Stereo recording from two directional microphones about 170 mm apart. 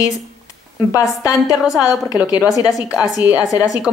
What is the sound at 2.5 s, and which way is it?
Speech, 20° left (ahead or behind).